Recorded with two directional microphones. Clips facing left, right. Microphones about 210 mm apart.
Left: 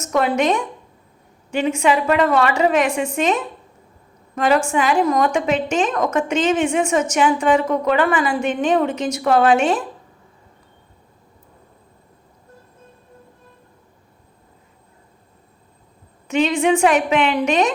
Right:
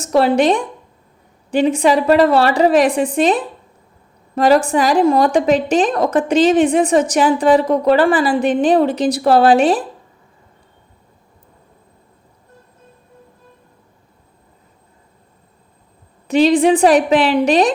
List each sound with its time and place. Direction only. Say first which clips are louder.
0.0 s a woman's voice: right 5 dB; 30° right (ahead or behind)
16.2 s a woman's voice: right 6 dB; 35° right (ahead or behind)